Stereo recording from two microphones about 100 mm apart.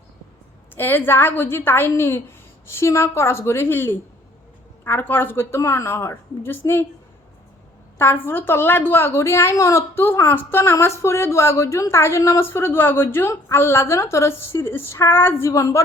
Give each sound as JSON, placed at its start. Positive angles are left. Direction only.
{"t": 0.8, "sound": "a woman's voice", "side_deg": 20}
{"t": 7.9, "sound": "a woman's voice", "side_deg": 20}